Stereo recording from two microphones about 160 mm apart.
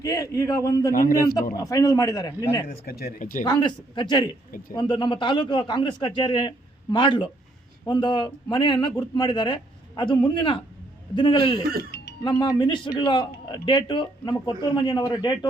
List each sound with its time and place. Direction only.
0.0 s a man's voice: 20° left (ahead or behind)
0.9 s speech: 60° left (ahead or behind)
1.5 s a man's voice: 20° left (ahead or behind)
2.6 s speech: 70° left (ahead or behind)
3.4 s a man's voice: 30° left (ahead or behind)
11.8 s music: 90° left
12.2 s a man's voice: 30° left (ahead or behind)